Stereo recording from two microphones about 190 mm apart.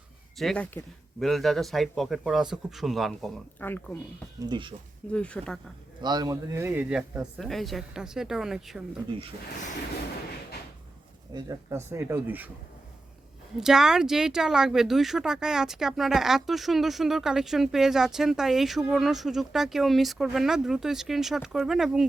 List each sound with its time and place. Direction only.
0.3 s speech: 5° left (ahead or behind)
4.4 s speech: 25° right (ahead or behind)
5.1 s speech: 5° left (ahead or behind)
6.0 s speech: 20° right (ahead or behind); by 8.8 s centre (ahead or behind)
11.3 s speech: 15° right (ahead or behind)
13.6 s speech: centre (ahead or behind)